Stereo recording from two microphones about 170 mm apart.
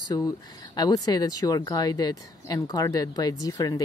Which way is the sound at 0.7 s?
25° left (ahead or behind).